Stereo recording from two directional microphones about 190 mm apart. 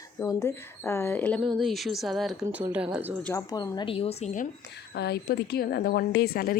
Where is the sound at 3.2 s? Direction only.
15° left (ahead or behind); by 4.5 s 40° left (ahead or behind).